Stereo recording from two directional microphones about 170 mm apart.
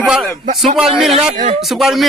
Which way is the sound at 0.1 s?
Centre (ahead or behind).